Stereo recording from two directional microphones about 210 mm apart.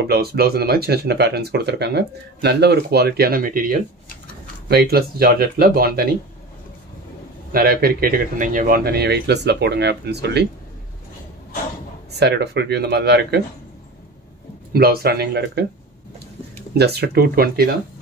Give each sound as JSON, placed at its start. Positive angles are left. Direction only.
{"t": 0.0, "sound": "speech", "side_deg": -50}
{"t": 7.5, "sound": "speech", "side_deg": -45}
{"t": 12.1, "sound": "speech", "side_deg": -50}
{"t": 14.7, "sound": "speech", "side_deg": -45}
{"t": 16.7, "sound": "speech", "side_deg": -50}